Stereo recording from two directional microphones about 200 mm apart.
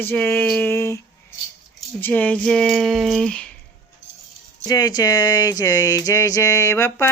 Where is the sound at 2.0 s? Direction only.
10° left (ahead or behind).